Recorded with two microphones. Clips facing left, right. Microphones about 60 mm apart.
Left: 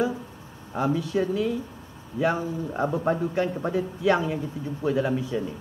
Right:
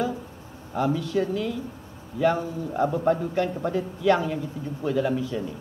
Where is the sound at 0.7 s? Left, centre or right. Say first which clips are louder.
Even; left.